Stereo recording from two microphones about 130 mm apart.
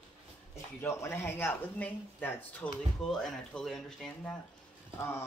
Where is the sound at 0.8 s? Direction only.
20° left (ahead or behind); by 4.3 s 5° left (ahead or behind).